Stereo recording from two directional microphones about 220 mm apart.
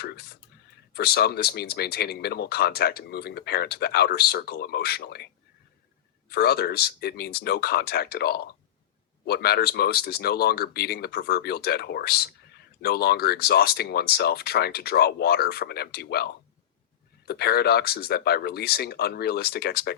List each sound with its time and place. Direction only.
0.0 s speech: 45° left (ahead or behind)